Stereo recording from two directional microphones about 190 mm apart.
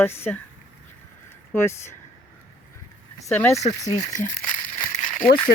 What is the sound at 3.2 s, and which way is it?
Speech, 15° left (ahead or behind).